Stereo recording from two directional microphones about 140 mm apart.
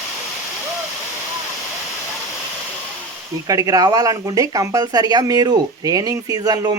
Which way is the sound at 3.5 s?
25° right (ahead or behind).